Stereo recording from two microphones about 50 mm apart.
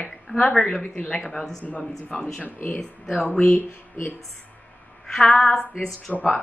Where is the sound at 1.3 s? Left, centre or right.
Centre.